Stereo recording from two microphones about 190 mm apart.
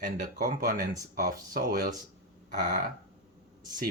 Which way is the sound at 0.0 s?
45° right (ahead or behind).